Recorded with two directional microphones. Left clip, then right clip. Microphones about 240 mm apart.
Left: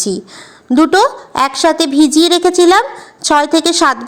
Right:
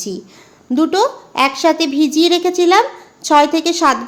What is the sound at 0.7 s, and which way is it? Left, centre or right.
A woman's voice, centre.